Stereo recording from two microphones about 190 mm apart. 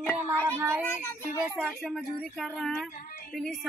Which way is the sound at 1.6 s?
Centre (ahead or behind).